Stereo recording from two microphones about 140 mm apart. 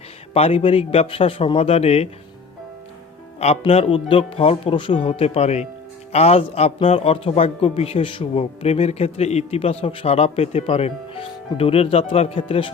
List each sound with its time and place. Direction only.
0.3 s a man's voice: 45° left (ahead or behind)
3.4 s a man's voice: 45° left (ahead or behind)